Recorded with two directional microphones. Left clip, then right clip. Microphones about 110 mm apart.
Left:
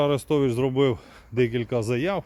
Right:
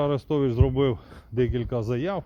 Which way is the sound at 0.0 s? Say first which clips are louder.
Left 2 dB; 25° left (ahead or behind).